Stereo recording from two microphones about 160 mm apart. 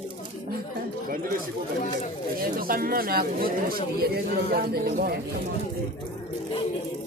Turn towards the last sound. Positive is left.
turn(degrees=-75)  # may be behind; listen again after turning